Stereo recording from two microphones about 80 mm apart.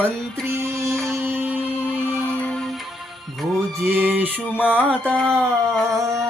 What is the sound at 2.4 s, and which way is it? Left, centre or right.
Music, centre.